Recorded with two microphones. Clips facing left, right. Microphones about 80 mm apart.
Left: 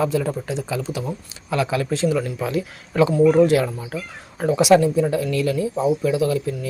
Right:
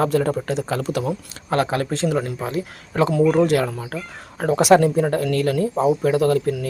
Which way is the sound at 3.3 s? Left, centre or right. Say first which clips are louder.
Left 2 dB; right.